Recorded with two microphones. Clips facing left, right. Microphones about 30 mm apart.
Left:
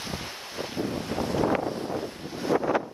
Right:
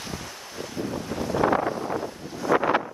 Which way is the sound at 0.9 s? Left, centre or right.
Left.